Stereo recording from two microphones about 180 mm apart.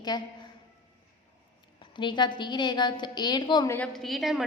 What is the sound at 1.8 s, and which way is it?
A woman's voice, 25° left (ahead or behind).